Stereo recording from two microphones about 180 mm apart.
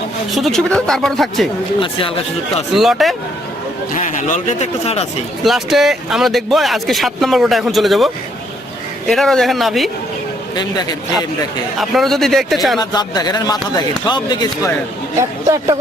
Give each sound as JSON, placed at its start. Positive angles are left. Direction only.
{"t": 0.3, "sound": "speech", "side_deg": 0}
{"t": 1.8, "sound": "speech", "side_deg": 30}
{"t": 2.7, "sound": "speech", "side_deg": 0}
{"t": 3.9, "sound": "speech", "side_deg": 45}
{"t": 5.4, "sound": "speech", "side_deg": 0}
{"t": 10.5, "sound": "speech", "side_deg": 20}
{"t": 11.8, "sound": "speech", "side_deg": 0}
{"t": 12.8, "sound": "speech", "side_deg": 20}
{"t": 15.2, "sound": "speech", "side_deg": -15}